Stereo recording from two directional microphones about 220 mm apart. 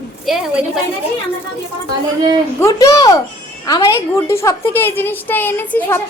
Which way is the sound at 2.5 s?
15° left (ahead or behind).